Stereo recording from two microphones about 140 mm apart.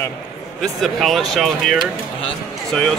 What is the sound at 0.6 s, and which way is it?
Speech, centre (ahead or behind).